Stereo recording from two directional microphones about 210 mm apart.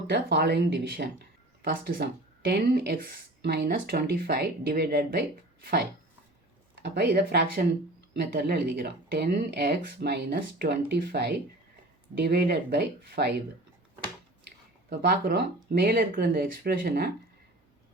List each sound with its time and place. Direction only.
0.1 s speech: 55° right (ahead or behind)
6.8 s speech: 50° right (ahead or behind)
14.8 s speech: 50° right (ahead or behind)